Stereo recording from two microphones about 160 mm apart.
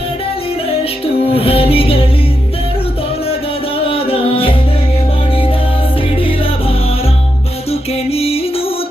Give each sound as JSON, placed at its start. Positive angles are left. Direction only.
{"t": 1.3, "sound": "music", "side_deg": 35}
{"t": 3.8, "sound": "music", "side_deg": 35}
{"t": 6.1, "sound": "music", "side_deg": 35}